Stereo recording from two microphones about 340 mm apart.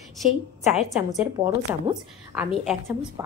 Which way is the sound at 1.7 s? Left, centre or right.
Centre.